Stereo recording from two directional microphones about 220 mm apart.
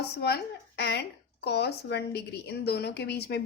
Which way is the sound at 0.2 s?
45° left (ahead or behind).